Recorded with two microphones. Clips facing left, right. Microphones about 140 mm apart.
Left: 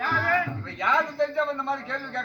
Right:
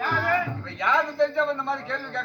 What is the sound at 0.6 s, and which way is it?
Speech, 25° right (ahead or behind).